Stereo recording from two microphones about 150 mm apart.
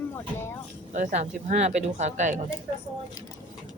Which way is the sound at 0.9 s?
50° right (ahead or behind).